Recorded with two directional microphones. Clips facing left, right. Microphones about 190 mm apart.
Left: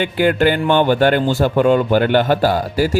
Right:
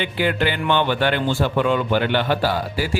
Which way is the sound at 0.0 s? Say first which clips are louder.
Left 6 dB; 45° left (ahead or behind).